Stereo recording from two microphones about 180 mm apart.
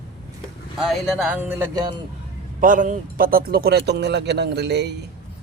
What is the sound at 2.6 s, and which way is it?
A man's voice, 45° right (ahead or behind).